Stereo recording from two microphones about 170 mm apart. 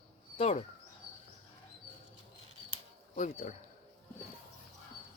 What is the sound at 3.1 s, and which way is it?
Speech, 45° left (ahead or behind).